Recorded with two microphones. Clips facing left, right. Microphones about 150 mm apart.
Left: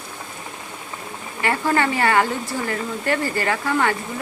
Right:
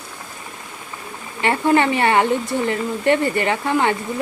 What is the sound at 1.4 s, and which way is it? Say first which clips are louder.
Speech: right 4 dB; 25° right (ahead or behind).